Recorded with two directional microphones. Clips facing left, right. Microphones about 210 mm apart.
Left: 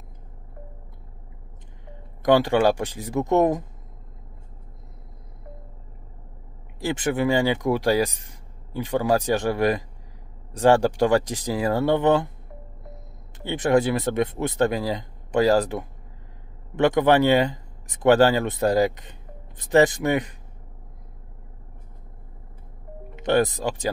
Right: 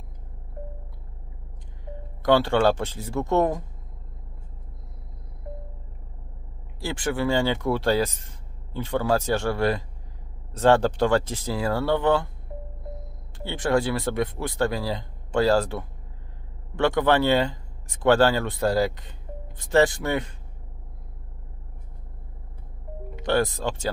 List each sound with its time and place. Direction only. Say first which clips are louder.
2.2 s speech: left 1 dB; 15° left (ahead or behind)
6.8 s speech: left 3 dB; 20° left (ahead or behind)
13.4 s speech: left 3 dB; 15° left (ahead or behind)
23.1 s speech: left 3 dB; 20° left (ahead or behind)